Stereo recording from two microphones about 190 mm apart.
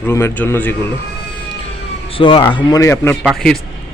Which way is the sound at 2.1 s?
30° left (ahead or behind).